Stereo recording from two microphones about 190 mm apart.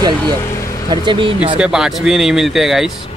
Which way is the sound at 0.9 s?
25° right (ahead or behind).